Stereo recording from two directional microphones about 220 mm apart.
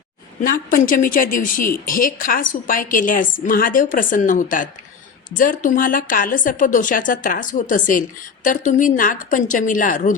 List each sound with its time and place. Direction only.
0.4 s a woman's voice: 40° left (ahead or behind)